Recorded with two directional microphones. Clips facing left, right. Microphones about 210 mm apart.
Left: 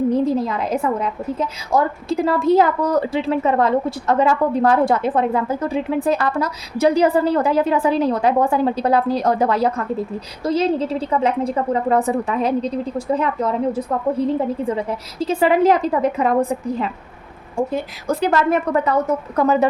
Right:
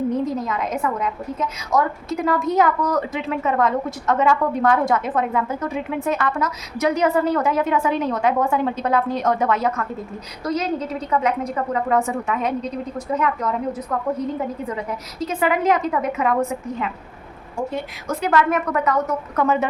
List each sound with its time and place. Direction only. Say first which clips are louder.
0.1 s a woman's voice: left 4 dB; 30° left (ahead or behind)
18.1 s a woman's voice: left 2 dB; 30° left (ahead or behind)